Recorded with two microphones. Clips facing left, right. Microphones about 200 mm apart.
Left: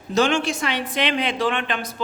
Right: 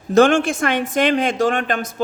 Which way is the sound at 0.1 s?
50° right (ahead or behind).